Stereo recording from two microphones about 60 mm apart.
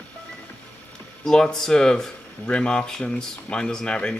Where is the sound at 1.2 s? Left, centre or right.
Centre.